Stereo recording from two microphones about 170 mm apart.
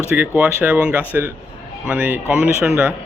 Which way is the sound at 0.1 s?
10° right (ahead or behind).